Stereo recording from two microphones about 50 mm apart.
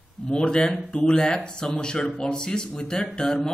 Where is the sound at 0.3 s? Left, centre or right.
Centre.